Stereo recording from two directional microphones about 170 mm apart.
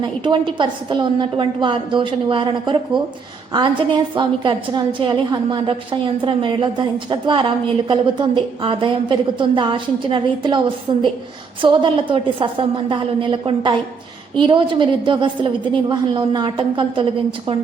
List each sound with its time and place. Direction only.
0.0 s a woman's voice: 25° right (ahead or behind)